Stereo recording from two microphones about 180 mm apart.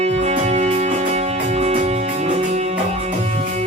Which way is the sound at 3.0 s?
40° right (ahead or behind).